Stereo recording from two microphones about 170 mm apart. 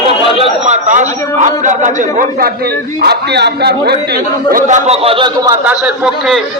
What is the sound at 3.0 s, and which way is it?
Speech, 75° right (ahead or behind).